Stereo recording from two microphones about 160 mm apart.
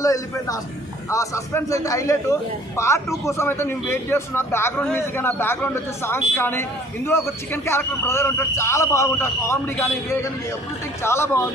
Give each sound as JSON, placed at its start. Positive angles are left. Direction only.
{"t": 0.0, "sound": "a man's voice", "side_deg": 20}
{"t": 11.0, "sound": "a man's voice", "side_deg": 15}